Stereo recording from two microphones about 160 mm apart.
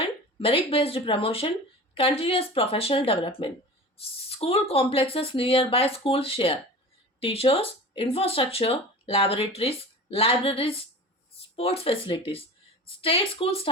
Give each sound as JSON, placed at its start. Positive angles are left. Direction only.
{"t": 0.0, "sound": "speech", "side_deg": 35}